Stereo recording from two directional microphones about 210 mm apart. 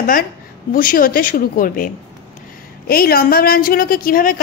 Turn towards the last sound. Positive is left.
turn(degrees=40)  # may be behind; listen again after turning